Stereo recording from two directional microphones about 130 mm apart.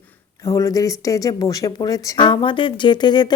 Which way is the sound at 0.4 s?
25° left (ahead or behind).